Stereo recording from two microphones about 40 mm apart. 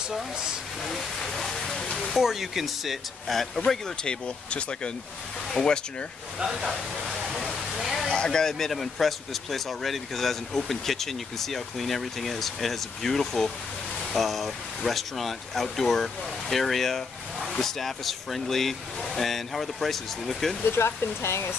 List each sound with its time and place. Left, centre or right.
0.1 s speech: centre
0.8 s speech: centre
2.0 s speech: centre
4.0 s speech: left
6.4 s speech: centre
7.1 s waterfall: centre
8.1 s speech: centre
20.6 s speech: left